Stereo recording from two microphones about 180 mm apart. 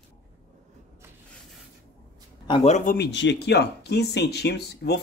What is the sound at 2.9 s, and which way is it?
Speech, 80° left.